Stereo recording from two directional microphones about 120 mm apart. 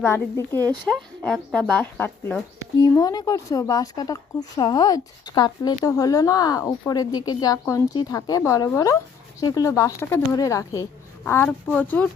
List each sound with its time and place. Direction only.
0.0 s speech: 20° left (ahead or behind)
0.9 s speech: 5° left (ahead or behind)
3.0 s speech: 35° left (ahead or behind)
11.4 s speech: 10° left (ahead or behind)